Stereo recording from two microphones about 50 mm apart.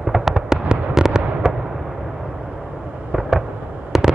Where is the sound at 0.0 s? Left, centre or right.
Centre.